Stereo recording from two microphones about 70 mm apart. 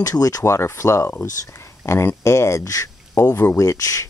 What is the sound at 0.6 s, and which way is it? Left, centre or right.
Speech, left.